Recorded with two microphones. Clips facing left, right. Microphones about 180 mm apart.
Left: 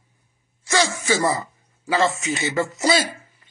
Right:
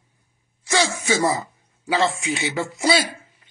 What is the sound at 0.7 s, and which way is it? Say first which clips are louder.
Speech: even; 20° right (ahead or behind).